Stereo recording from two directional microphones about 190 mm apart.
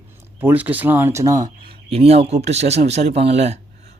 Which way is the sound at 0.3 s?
10° right (ahead or behind).